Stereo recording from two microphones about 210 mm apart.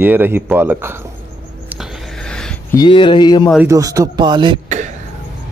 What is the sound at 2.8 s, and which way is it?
Speech, 20° left (ahead or behind).